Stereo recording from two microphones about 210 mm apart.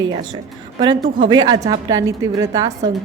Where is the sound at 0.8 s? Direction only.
20° right (ahead or behind).